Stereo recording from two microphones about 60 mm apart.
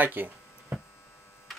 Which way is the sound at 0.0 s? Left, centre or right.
Right.